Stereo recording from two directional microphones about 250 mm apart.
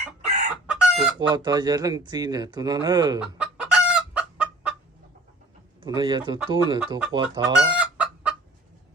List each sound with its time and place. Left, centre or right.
0.7 s chicken: centre
1.3 s speech: centre
3.2 s chicken: centre
5.8 s speech: centre
7.7 s chicken: centre